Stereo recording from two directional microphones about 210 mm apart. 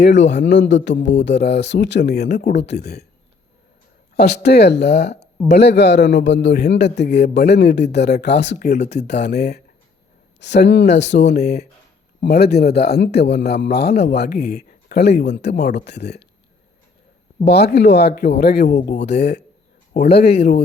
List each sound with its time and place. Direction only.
0.0 s a man's voice: 55° left (ahead or behind)
4.2 s a man's voice: 50° left (ahead or behind)
8.6 s speech: 35° left (ahead or behind)
9.0 s a man's voice: 50° left (ahead or behind)
10.4 s speech: 55° left (ahead or behind)
12.2 s a man's voice: 50° left (ahead or behind)
17.4 s a man's voice: 50° left (ahead or behind)
18.7 s speech: 30° left (ahead or behind)
18.9 s a man's voice: 55° left (ahead or behind)
19.9 s speech: 30° left (ahead or behind)